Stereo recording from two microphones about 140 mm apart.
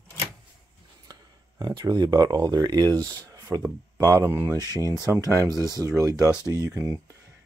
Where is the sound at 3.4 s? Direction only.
20° right (ahead or behind).